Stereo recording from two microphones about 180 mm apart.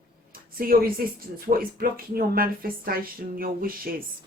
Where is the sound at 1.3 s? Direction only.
55° right (ahead or behind).